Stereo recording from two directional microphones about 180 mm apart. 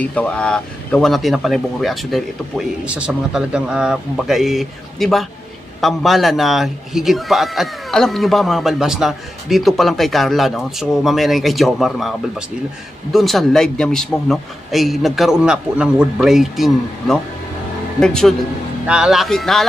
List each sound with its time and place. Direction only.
0.0 s a man's voice: 10° left (ahead or behind)